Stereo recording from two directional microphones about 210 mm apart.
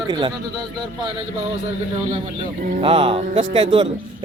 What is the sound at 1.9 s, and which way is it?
Speech, 25° right (ahead or behind).